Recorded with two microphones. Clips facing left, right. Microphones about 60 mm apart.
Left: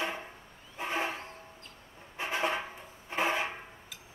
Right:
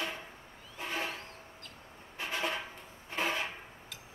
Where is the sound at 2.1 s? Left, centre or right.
Left.